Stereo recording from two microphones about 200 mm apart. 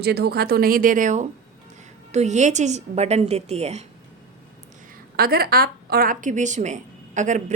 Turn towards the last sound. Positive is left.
turn(degrees=-40)  # may be behind; listen again after turning